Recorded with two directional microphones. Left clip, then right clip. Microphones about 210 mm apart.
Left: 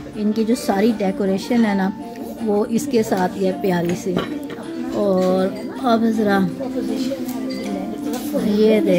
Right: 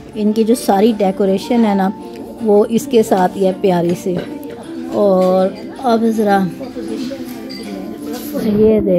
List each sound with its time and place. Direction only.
0.2 s a woman's voice: 40° right (ahead or behind)
8.5 s a woman's voice: 35° right (ahead or behind)